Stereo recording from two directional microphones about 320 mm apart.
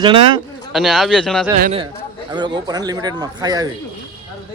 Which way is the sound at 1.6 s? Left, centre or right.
Centre.